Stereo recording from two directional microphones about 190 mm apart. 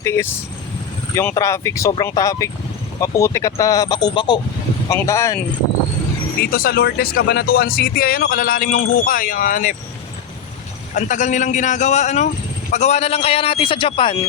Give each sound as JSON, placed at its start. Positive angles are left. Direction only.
{"t": 0.0, "sound": "a man's voice", "side_deg": 15}
{"t": 6.4, "sound": "speech", "side_deg": 50}
{"t": 10.9, "sound": "a man's voice", "side_deg": 40}